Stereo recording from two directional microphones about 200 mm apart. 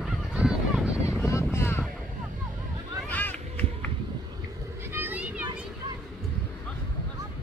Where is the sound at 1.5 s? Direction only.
10° left (ahead or behind).